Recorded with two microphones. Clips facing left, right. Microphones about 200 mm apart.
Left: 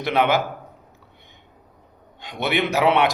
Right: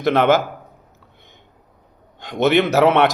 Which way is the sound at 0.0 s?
45° right (ahead or behind).